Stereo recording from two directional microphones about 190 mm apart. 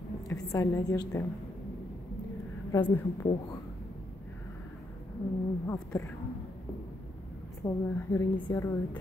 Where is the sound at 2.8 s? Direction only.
10° left (ahead or behind).